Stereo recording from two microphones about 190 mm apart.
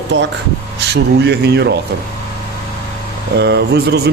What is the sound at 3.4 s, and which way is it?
Speech, 60° right (ahead or behind).